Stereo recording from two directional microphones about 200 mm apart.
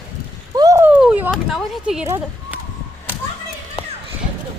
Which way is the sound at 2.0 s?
10° right (ahead or behind).